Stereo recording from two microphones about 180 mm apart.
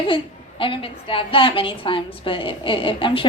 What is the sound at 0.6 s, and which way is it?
A woman's voice, 30° left (ahead or behind).